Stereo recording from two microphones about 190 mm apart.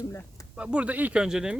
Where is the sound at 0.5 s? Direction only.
5° right (ahead or behind).